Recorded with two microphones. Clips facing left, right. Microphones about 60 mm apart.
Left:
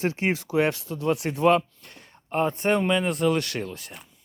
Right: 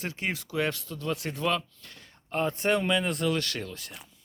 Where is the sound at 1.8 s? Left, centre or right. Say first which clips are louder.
Left 2 dB; centre.